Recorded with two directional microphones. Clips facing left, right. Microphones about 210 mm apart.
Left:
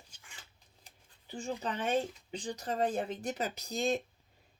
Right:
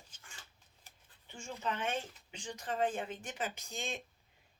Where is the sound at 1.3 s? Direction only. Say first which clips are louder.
Left 4 dB; 35° left (ahead or behind).